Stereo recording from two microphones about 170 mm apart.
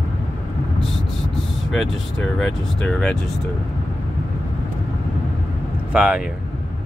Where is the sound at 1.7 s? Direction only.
Centre (ahead or behind).